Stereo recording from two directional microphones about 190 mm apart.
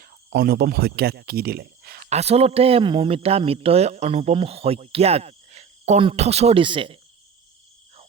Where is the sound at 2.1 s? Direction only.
35° right (ahead or behind).